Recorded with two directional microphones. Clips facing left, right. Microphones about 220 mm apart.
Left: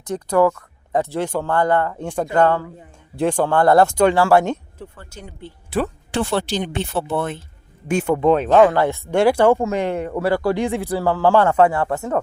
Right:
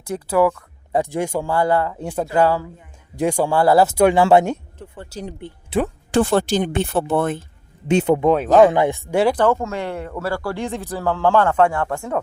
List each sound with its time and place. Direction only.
0.0 s speech: 10° right (ahead or behind)
4.9 s speech: 35° right (ahead or behind)
6.1 s speech: 45° right (ahead or behind)
7.9 s speech: 20° right (ahead or behind)
8.2 s speech: 10° right (ahead or behind)
9.3 s speech: 10° left (ahead or behind)